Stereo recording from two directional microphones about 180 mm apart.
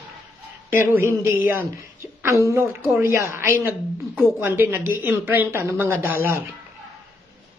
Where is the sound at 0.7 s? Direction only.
15° right (ahead or behind).